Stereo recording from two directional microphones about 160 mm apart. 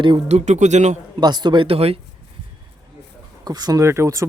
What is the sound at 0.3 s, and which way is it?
Speech, 45° right (ahead or behind).